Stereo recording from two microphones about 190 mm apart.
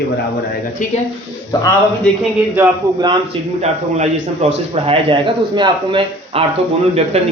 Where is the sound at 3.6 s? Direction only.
35° right (ahead or behind).